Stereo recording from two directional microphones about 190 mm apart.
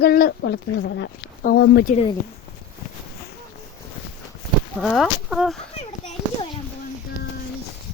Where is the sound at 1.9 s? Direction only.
25° left (ahead or behind).